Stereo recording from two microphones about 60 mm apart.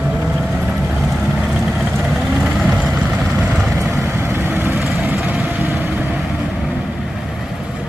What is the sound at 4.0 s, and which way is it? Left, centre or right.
Vehicle, right.